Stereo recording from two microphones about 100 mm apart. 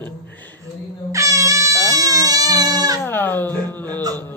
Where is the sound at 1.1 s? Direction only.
35° right (ahead or behind).